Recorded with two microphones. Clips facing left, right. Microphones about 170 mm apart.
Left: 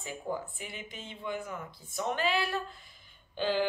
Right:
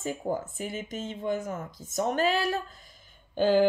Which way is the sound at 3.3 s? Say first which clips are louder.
Right 8 dB; 45° right (ahead or behind).